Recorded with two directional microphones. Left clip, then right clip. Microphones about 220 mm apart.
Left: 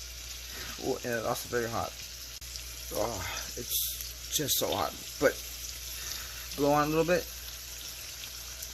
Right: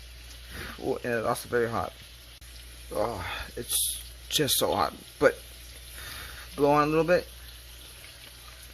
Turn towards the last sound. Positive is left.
turn(degrees=-10)  # may be behind; listen again after turning